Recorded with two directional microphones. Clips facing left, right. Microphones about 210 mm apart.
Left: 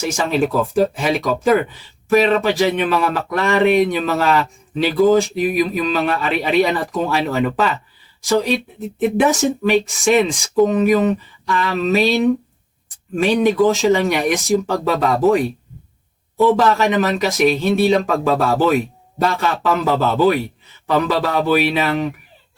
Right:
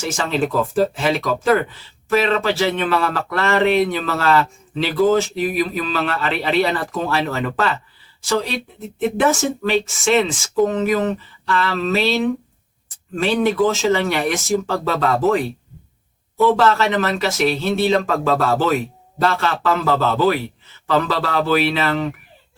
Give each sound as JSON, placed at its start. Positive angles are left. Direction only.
{"t": 0.0, "sound": "speech", "side_deg": 15}
{"t": 16.5, "sound": "speech", "side_deg": 15}